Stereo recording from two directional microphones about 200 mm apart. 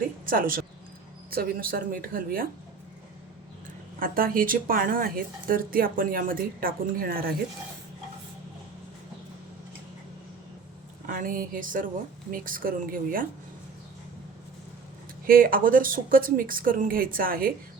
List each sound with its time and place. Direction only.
0.3 s a woman's voice: 45° right (ahead or behind)
4.0 s a woman's voice: 45° right (ahead or behind)
11.0 s a sound: 45° right (ahead or behind)
12.3 s a woman's voice: 45° right (ahead or behind)
15.3 s a woman's voice: 45° right (ahead or behind)